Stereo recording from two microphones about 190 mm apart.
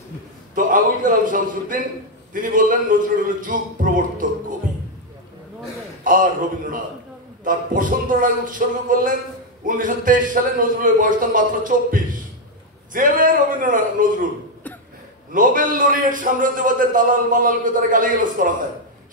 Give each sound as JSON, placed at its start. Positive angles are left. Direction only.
{"t": 0.6, "sound": "a man's voice", "side_deg": -45}
{"t": 6.0, "sound": "a man's voice", "side_deg": -45}
{"t": 15.3, "sound": "a man's voice", "side_deg": -45}